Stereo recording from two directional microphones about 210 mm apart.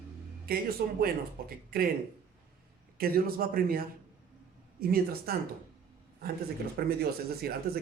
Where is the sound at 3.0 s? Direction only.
45° right (ahead or behind).